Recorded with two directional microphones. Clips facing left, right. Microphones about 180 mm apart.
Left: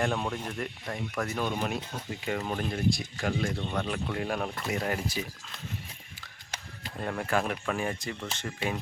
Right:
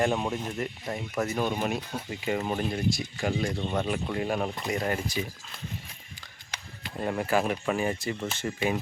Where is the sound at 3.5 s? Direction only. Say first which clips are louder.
Right 3 dB; 15° right (ahead or behind); by 5.2 s centre (ahead or behind).